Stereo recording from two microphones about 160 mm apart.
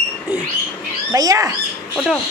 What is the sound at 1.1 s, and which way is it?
Speech, 20° right (ahead or behind).